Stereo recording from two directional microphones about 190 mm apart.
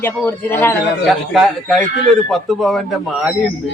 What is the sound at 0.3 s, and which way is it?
Speech, 10° left (ahead or behind).